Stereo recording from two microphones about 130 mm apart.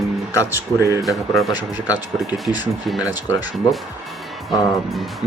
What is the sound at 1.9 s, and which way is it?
Speech, 30° left (ahead or behind).